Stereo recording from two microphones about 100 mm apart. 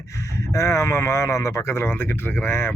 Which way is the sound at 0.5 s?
30° left (ahead or behind).